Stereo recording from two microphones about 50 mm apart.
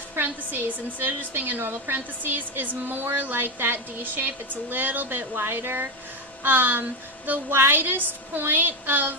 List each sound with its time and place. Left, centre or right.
0.2 s a woman's voice: right